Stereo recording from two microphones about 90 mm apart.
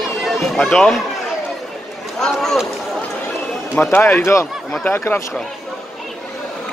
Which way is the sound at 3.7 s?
30° left (ahead or behind).